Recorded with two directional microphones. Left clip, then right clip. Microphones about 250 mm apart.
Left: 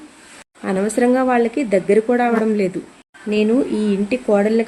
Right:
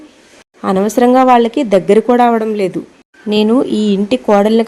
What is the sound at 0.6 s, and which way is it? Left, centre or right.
Speech, right.